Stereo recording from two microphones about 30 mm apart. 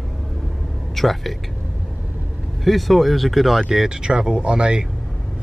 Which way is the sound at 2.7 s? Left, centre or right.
Centre.